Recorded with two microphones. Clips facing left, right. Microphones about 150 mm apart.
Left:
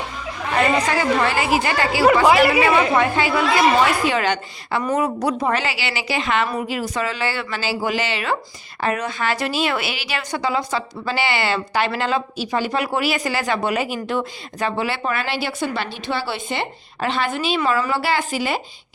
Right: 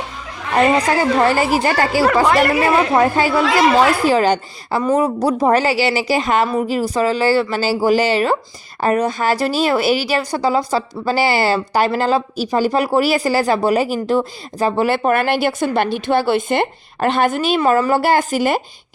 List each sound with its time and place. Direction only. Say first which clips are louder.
0.5 s speech: right 4 dB; 40° right (ahead or behind)
2.2 s a woman's voice: even; 5° left (ahead or behind)
3.0 s speech: right 4 dB; 40° right (ahead or behind)
4.8 s speech: right 5 dB; 25° right (ahead or behind)
14.8 s a woman's voice: right 8 dB; 50° right (ahead or behind)